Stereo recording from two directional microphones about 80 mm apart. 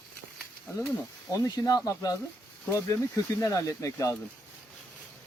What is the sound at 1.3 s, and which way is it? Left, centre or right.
Speech, left.